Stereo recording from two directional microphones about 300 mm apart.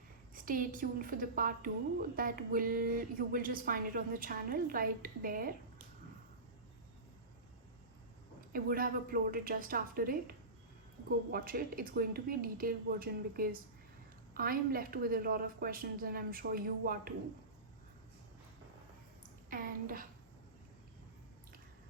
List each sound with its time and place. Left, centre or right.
0.3 s a woman's voice: right
8.5 s a woman's voice: right
19.5 s a woman's voice: right